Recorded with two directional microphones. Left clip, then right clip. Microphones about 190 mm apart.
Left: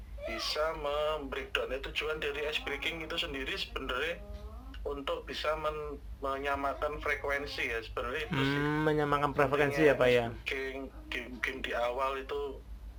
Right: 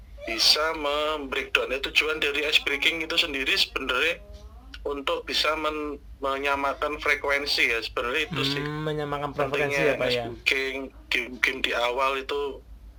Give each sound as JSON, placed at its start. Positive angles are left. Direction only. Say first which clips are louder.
{"t": 0.3, "sound": "speech", "louder": "right 11 dB", "side_deg": -50}
{"t": 8.3, "sound": "speech", "louder": "right 3 dB", "side_deg": -20}
{"t": 10.4, "sound": "speech", "louder": "right 11 dB", "side_deg": -55}